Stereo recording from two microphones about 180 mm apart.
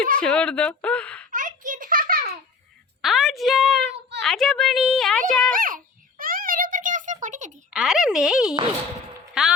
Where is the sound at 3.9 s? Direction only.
70° right (ahead or behind).